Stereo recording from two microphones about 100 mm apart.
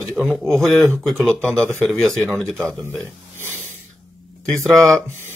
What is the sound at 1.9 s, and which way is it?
Speech, 5° left (ahead or behind).